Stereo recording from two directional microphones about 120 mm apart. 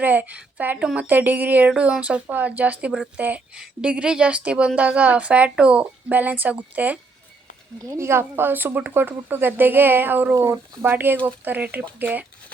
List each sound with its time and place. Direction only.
0.0 s a woman's voice: 15° right (ahead or behind)
7.8 s a woman's voice: 25° right (ahead or behind)
10.3 s speech: 25° right (ahead or behind)
10.9 s a woman's voice: 15° right (ahead or behind)